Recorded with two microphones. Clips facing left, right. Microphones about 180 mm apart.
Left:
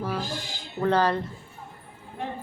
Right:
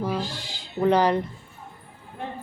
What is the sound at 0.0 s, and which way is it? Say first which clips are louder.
Speech: right 3 dB; 15° right (ahead or behind).